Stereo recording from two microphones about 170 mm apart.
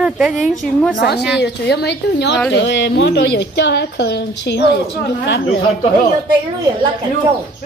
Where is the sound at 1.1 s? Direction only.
75° left (ahead or behind).